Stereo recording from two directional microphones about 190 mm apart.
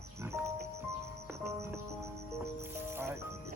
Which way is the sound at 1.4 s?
15° right (ahead or behind).